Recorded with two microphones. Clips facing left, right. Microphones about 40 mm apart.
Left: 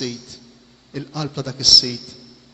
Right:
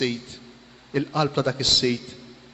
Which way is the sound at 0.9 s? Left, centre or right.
Right.